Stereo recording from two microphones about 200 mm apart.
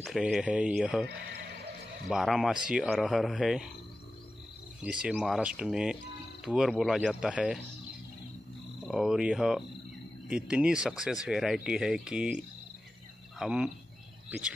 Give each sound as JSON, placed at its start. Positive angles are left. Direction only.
{"t": 0.0, "sound": "speech", "side_deg": 0}
{"t": 2.0, "sound": "speech", "side_deg": 0}
{"t": 4.8, "sound": "speech", "side_deg": -5}
{"t": 8.8, "sound": "speech", "side_deg": 0}
{"t": 13.4, "sound": "speech", "side_deg": -5}